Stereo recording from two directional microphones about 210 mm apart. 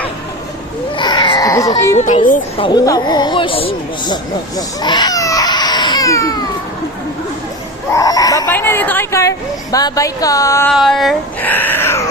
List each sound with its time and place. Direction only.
0.9 s baby cry: 20° left (ahead or behind)
2.0 s a child's voice: 35° left (ahead or behind)
2.6 s speech: 20° left (ahead or behind)
4.0 s baby cry: 20° left (ahead or behind)
7.9 s speech: 15° left (ahead or behind)
10.8 s speech: centre (ahead or behind)